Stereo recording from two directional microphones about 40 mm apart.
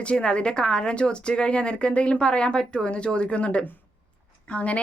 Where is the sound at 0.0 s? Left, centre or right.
Left.